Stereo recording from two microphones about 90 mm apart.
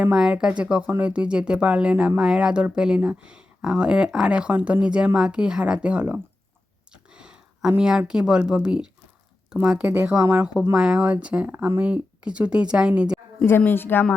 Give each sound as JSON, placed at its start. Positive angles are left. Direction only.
{"t": 0.0, "sound": "speech", "side_deg": -10}
{"t": 6.9, "sound": "a sound", "side_deg": -10}
{"t": 7.8, "sound": "speech", "side_deg": -10}
{"t": 13.7, "sound": "speech", "side_deg": 25}